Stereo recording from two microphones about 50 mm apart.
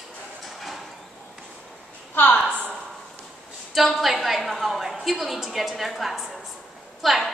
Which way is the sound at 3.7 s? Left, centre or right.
Centre.